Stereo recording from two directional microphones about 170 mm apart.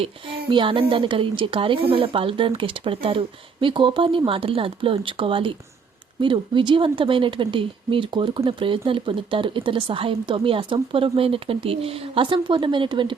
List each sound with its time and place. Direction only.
0.5 s speech: 30° right (ahead or behind)